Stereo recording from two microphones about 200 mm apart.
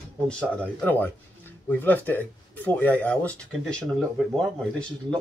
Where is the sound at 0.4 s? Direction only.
5° left (ahead or behind).